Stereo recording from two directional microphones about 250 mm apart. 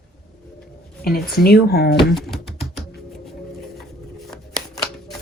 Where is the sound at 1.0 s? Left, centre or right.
Left.